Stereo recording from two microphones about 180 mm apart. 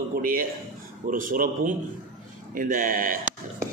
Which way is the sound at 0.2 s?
50° right (ahead or behind).